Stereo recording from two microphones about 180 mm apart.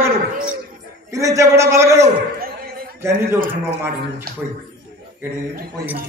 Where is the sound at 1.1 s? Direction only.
15° right (ahead or behind).